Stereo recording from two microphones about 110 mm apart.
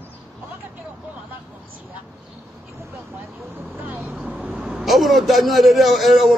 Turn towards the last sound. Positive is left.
turn(degrees=0)  # may be behind; listen again after turning